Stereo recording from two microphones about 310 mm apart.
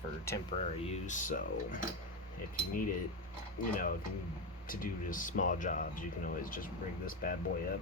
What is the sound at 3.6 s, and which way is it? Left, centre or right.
Speech, left.